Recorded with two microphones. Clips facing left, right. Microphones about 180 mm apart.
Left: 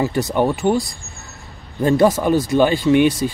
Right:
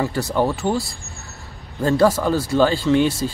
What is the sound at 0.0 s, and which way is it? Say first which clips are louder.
Speech: left 2 dB; 20° left (ahead or behind).